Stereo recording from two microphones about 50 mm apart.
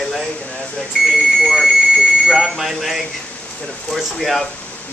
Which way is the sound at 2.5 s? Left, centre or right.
Centre.